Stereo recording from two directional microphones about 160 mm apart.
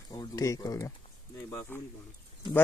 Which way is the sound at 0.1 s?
25° left (ahead or behind).